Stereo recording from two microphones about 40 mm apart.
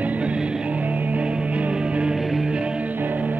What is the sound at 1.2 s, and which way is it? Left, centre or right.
Music, right.